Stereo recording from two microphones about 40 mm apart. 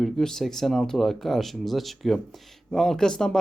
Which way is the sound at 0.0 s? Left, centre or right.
Centre.